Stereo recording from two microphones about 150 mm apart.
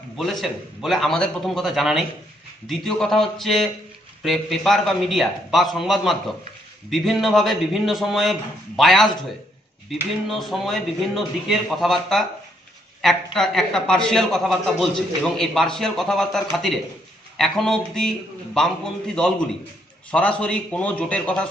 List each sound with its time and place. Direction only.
0.2 s a man's voice: centre (ahead or behind)
10.2 s a man's voice: centre (ahead or behind)